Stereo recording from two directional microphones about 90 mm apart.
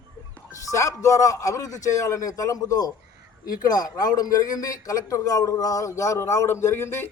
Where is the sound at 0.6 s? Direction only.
35° left (ahead or behind).